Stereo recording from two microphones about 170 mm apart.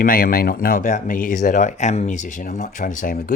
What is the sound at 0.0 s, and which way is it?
Speech, 55° left (ahead or behind).